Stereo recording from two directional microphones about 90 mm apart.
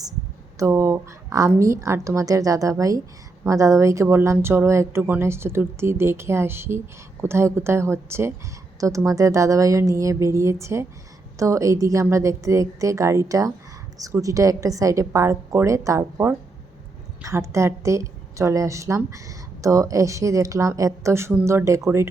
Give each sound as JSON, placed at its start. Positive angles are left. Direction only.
{"t": 0.6, "sound": "a woman's voice", "side_deg": -35}